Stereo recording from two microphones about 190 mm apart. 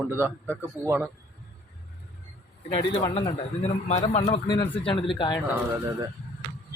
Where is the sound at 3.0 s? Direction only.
20° left (ahead or behind).